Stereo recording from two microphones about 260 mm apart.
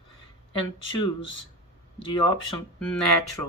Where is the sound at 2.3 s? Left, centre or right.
Centre.